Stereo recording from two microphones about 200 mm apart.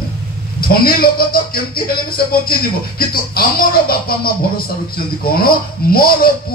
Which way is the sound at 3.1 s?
50° left (ahead or behind).